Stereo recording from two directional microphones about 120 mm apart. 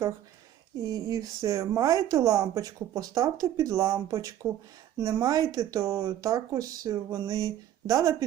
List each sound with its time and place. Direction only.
0.8 s a woman's voice: 30° right (ahead or behind)